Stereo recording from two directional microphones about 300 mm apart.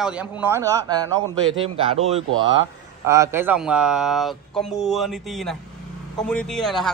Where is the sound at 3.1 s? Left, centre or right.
Centre.